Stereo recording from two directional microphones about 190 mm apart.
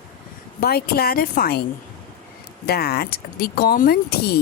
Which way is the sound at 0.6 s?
55° left (ahead or behind).